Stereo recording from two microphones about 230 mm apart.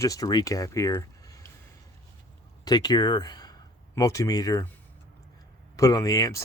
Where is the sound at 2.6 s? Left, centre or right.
Centre.